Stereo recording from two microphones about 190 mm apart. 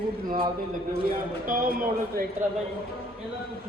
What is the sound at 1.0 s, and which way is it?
A woman's voice, 45° right (ahead or behind).